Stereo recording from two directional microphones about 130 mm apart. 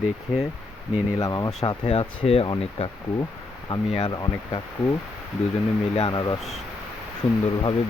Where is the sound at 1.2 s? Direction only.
30° left (ahead or behind).